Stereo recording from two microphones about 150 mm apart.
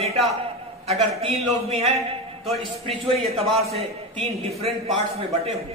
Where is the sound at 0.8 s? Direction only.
45° right (ahead or behind).